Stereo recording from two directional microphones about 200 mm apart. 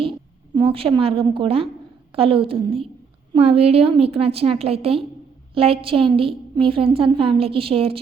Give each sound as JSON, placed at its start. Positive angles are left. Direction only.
{"t": 0.0, "sound": "a woman's voice", "side_deg": -25}